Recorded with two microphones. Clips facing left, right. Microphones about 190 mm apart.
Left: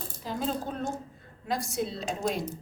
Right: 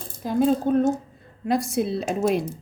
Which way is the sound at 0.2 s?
50° right (ahead or behind).